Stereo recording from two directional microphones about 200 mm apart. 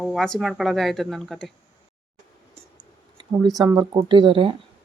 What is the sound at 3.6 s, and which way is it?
Speech, 20° right (ahead or behind).